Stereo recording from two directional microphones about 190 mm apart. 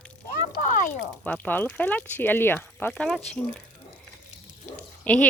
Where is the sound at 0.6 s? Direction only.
40° left (ahead or behind).